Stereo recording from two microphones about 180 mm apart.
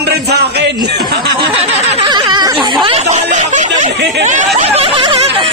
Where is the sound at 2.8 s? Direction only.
35° right (ahead or behind).